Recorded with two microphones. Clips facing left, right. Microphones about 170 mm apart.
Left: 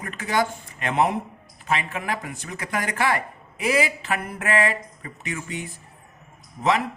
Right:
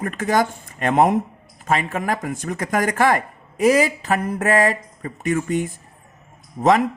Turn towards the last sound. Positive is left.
turn(degrees=-45)  # may be behind; listen again after turning